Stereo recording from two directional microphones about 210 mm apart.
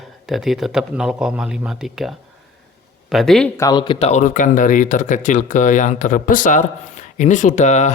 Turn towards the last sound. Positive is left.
turn(degrees=35)  # may be behind; listen again after turning